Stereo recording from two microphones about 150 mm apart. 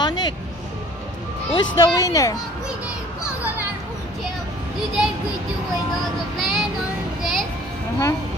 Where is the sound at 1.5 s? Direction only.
30° left (ahead or behind).